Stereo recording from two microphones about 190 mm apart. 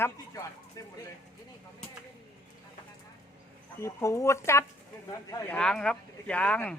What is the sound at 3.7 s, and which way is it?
Speech, 15° left (ahead or behind).